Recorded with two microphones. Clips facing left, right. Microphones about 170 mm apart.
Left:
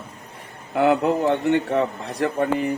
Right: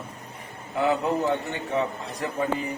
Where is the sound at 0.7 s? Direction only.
65° left (ahead or behind).